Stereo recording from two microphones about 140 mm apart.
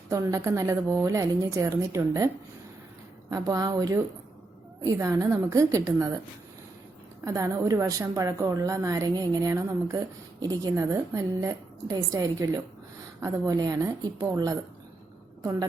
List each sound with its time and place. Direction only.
0.1 s a woman's voice: 25° right (ahead or behind)
7.3 s a woman's voice: 25° right (ahead or behind)